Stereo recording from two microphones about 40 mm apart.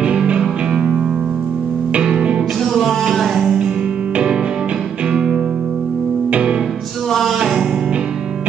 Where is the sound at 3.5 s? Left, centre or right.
Centre.